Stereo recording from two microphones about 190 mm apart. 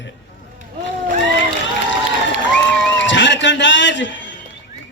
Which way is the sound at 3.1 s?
70° left (ahead or behind).